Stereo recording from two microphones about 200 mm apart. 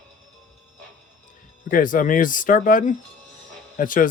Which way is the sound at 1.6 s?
45° left (ahead or behind).